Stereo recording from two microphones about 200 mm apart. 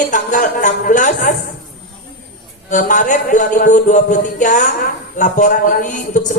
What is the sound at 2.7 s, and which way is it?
A woman's voice, 40° left (ahead or behind).